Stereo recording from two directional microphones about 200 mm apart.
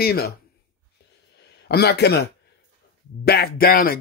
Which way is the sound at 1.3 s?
55° left (ahead or behind).